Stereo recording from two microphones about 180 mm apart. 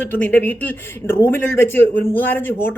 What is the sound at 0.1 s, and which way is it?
A man's voice, 10° left (ahead or behind).